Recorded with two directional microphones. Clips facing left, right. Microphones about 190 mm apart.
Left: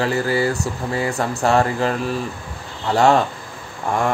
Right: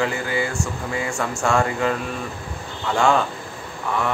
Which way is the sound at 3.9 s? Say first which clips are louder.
Left 3 dB; 45° left (ahead or behind).